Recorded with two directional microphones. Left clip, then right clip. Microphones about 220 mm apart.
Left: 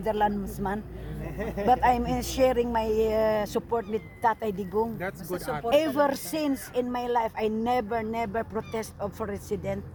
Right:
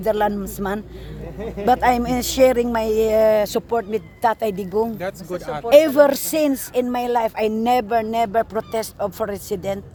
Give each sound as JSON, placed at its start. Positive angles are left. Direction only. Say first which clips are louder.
{"t": 0.0, "sound": "speech", "louder": "right 6 dB", "side_deg": -55}
{"t": 1.4, "sound": "speech", "louder": "right 3 dB", "side_deg": 5}
{"t": 1.6, "sound": "speech", "louder": "right 6 dB", "side_deg": -55}